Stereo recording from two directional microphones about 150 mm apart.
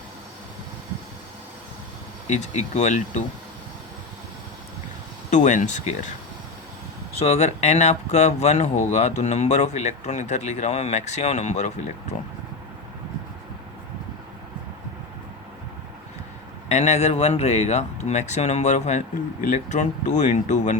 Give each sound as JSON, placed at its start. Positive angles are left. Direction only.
{"t": 2.2, "sound": "speech", "side_deg": 50}
{"t": 5.3, "sound": "speech", "side_deg": 55}
{"t": 7.2, "sound": "speech", "side_deg": 45}
{"t": 16.6, "sound": "speech", "side_deg": 50}